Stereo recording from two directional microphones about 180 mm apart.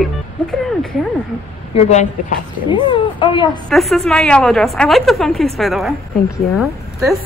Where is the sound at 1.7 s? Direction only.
40° left (ahead or behind).